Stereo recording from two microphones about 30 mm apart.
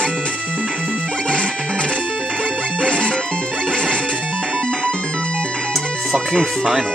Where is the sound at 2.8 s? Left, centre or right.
Left.